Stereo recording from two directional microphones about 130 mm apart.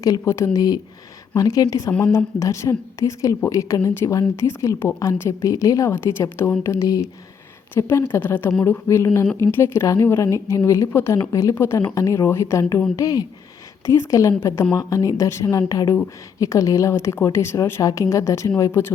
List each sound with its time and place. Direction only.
0.0 s a woman's voice: 25° left (ahead or behind)
1.9 s a woman's voice: 15° left (ahead or behind)